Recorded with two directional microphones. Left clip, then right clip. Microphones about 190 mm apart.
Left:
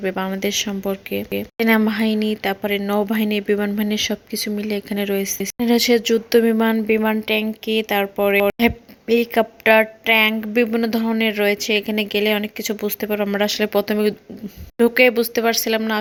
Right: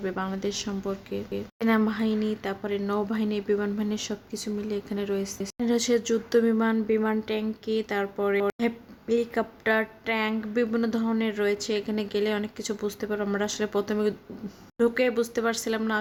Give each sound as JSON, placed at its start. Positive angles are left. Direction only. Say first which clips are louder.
{"t": 0.0, "sound": "speech", "louder": "left 8 dB", "side_deg": 25}